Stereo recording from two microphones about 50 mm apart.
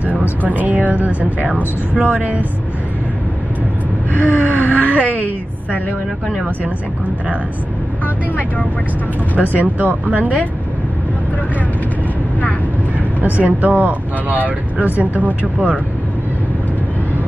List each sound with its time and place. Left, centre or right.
0.0 s a woman's voice: right
4.1 s gasp: left
4.5 s wail: left
4.9 s speech: right
5.2 s a sound: left
9.6 s speech: right
13.2 s speech: right